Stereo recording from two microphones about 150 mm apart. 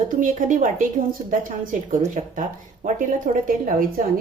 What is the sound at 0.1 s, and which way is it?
A woman's voice, 60° right (ahead or behind).